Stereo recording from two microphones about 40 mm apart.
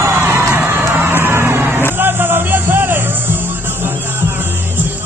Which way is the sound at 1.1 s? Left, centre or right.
Right.